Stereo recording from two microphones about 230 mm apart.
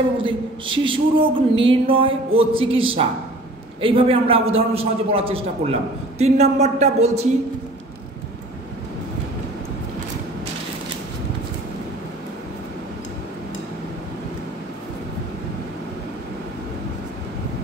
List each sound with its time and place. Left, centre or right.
0.2 s a man's voice: right